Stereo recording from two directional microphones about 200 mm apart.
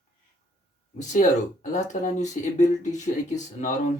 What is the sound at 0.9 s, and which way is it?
Speech, 35° left (ahead or behind).